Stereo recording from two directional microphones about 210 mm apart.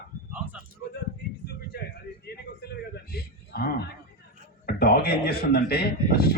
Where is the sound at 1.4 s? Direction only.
50° left (ahead or behind).